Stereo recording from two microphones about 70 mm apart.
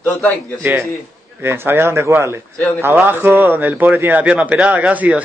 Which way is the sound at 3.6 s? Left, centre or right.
Right.